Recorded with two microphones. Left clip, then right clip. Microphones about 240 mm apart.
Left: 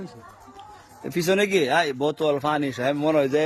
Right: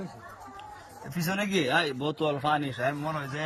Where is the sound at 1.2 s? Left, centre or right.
Left.